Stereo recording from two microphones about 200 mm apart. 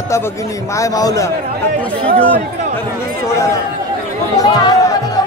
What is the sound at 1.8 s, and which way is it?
A man's voice, 5° left (ahead or behind).